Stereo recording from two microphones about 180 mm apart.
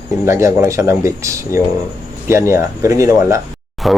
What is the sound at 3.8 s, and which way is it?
Speech, centre (ahead or behind).